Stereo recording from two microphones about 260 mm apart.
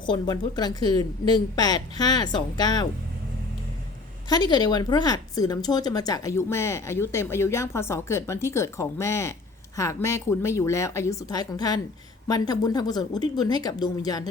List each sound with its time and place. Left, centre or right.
0.0 s a woman's voice: centre
4.4 s a woman's voice: centre